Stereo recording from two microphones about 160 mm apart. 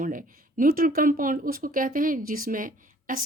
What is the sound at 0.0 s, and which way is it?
Speech, 55° right (ahead or behind).